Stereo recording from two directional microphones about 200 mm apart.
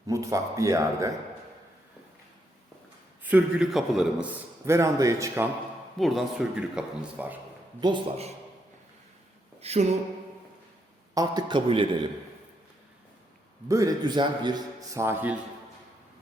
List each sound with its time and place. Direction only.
0.1 s a man's voice: 15° right (ahead or behind)
3.2 s a man's voice: 5° right (ahead or behind)
6.0 s speech: centre (ahead or behind)
7.8 s a man's voice: 25° right (ahead or behind)
9.6 s a sound: 30° right (ahead or behind)
11.1 s a man's voice: 20° right (ahead or behind)
13.7 s a man's voice: 15° right (ahead or behind)